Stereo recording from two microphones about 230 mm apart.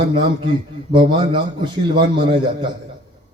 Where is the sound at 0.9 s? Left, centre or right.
Centre.